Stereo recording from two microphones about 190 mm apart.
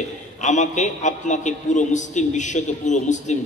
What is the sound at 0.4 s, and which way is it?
A man's voice, 40° left (ahead or behind).